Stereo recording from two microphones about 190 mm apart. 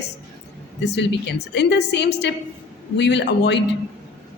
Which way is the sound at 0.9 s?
65° left (ahead or behind).